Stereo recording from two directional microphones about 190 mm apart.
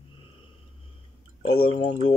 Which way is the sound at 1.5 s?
30° left (ahead or behind).